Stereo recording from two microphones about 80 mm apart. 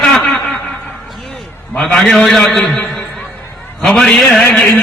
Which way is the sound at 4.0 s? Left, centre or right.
Centre.